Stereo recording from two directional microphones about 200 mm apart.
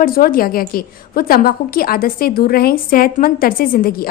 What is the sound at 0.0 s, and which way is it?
A woman's voice, 45° left (ahead or behind).